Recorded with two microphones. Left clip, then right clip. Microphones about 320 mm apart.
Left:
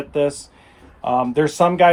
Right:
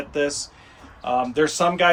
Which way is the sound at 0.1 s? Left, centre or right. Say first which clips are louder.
Left 4 dB; centre.